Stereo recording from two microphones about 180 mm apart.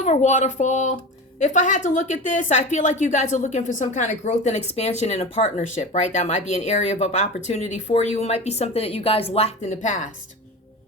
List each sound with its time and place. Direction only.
0.0 s a woman's voice: 40° left (ahead or behind)